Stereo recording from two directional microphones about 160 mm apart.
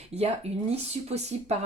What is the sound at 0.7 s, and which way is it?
Speech, 40° right (ahead or behind).